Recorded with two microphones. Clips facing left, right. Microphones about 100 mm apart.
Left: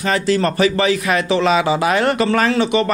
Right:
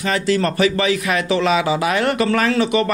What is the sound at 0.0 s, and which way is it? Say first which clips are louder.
A man's voice: left 2 dB; 35° left (ahead or behind).